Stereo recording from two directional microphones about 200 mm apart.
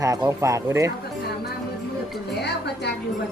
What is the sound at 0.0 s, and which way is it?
Speech, 15° right (ahead or behind).